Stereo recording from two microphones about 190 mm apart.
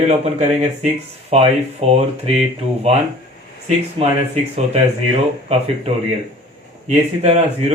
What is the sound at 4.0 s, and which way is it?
Speech, 25° right (ahead or behind).